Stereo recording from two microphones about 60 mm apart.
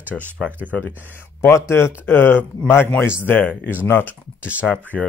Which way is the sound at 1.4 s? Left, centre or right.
Left.